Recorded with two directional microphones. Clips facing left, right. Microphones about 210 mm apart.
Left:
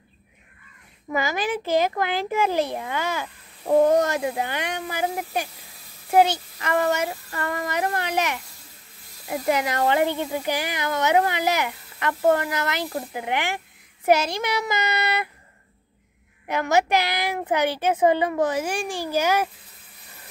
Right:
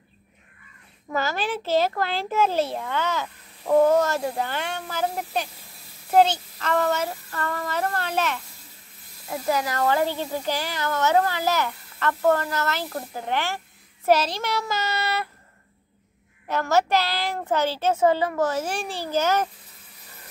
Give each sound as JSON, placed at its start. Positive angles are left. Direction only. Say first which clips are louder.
{"t": 1.1, "sound": "a child's voice", "louder": "left 1 dB", "side_deg": 15}
{"t": 16.4, "sound": "a child's voice", "louder": "left 1 dB", "side_deg": 15}